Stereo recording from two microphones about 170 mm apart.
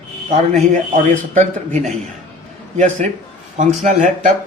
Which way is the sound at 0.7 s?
50° right (ahead or behind).